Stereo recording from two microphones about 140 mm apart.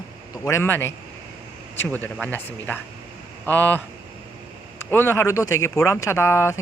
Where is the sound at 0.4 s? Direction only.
15° left (ahead or behind).